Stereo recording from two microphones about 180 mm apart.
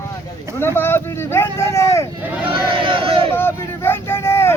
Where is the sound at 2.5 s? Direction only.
30° right (ahead or behind).